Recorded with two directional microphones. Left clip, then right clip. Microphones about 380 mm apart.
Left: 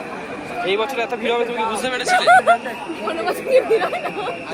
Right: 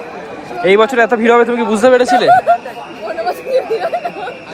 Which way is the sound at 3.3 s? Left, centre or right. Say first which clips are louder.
Even; left.